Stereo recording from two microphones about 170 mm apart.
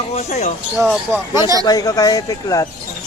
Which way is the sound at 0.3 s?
40° left (ahead or behind).